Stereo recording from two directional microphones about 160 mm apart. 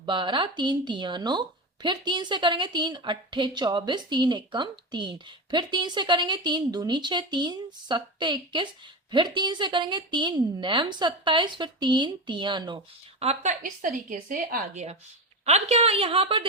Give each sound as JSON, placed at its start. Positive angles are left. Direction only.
{"t": 0.0, "sound": "a woman's voice", "side_deg": -30}
{"t": 15.4, "sound": "a woman's voice", "side_deg": -40}